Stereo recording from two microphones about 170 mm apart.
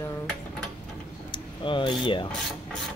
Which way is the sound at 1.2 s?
30° left (ahead or behind).